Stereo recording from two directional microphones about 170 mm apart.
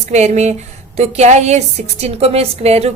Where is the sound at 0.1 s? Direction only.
40° right (ahead or behind).